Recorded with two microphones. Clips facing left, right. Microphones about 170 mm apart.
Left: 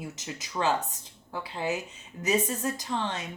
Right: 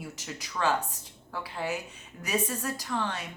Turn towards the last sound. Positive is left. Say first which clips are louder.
# left 1 dB
turn(degrees=20)  # may be behind; listen again after turning